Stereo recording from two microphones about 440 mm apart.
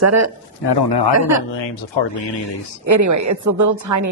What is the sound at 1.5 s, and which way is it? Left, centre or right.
Speech, left.